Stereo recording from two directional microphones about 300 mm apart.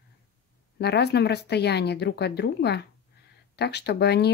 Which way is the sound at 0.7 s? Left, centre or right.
Left.